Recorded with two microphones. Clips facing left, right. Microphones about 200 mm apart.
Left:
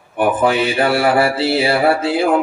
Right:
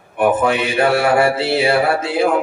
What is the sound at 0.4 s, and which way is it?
Mantra, 30° left (ahead or behind).